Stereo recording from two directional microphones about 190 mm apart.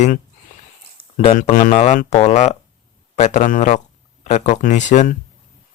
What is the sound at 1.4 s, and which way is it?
Speech, 45° left (ahead or behind).